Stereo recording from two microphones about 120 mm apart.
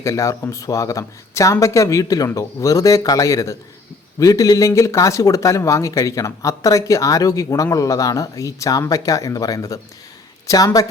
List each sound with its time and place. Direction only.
0.0 s a woman's voice: 25° left (ahead or behind)